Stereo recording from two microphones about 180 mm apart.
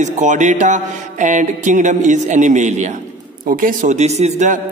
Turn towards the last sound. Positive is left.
turn(degrees=-40)  # may be behind; listen again after turning